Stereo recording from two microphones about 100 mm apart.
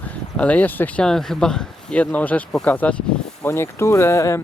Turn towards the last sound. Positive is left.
turn(degrees=30)  # may be behind; listen again after turning